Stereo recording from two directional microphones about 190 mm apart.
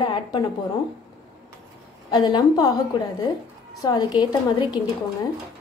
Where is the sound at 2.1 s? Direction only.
20° left (ahead or behind).